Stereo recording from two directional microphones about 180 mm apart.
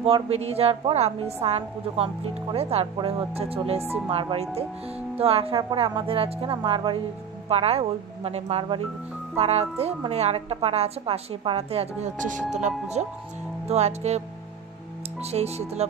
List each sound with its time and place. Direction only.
0.0 s a woman's voice: 35° right (ahead or behind)